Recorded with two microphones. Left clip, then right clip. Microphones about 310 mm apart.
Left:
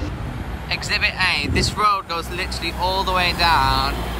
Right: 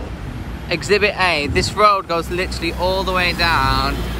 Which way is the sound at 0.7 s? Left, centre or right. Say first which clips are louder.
Right 5 dB; centre.